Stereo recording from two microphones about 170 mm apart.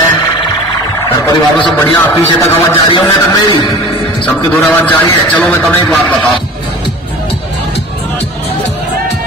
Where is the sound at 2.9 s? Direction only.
30° left (ahead or behind).